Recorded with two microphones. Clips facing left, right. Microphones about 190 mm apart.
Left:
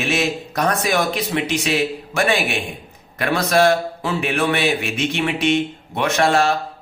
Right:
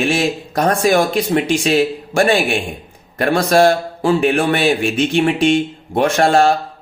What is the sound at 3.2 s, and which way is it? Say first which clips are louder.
Speech: right 4 dB; 30° right (ahead or behind).